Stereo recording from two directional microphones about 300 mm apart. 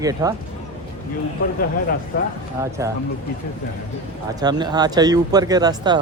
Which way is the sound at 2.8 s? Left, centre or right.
Centre.